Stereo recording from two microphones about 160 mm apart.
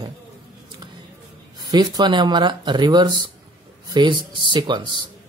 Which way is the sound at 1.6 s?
25° right (ahead or behind).